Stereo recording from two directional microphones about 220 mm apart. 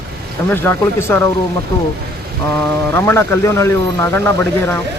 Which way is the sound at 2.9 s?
10° left (ahead or behind).